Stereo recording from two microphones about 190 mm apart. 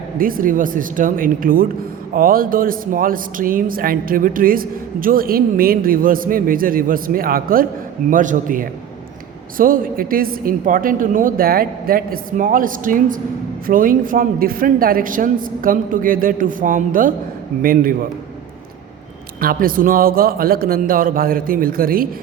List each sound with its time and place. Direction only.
0.2 s speech: 45° right (ahead or behind)
19.4 s speech: 50° right (ahead or behind)